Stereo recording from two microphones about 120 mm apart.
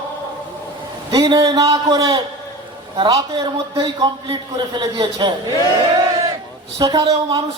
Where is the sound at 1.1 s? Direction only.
30° right (ahead or behind).